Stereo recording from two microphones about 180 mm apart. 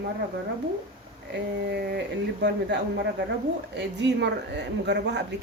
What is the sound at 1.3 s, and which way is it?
A woman's voice, 65° right (ahead or behind).